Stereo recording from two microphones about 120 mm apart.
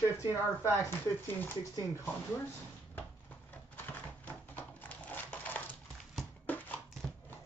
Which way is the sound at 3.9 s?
15° left (ahead or behind).